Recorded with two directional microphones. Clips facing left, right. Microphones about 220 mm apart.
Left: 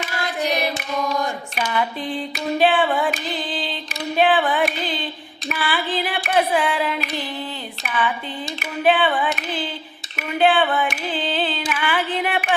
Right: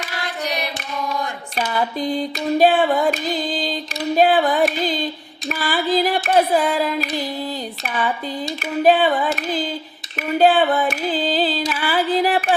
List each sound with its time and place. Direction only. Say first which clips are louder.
1.5 s female singing: right 4 dB; 40° right (ahead or behind)
8.8 s female singing: right 3 dB; 40° right (ahead or behind)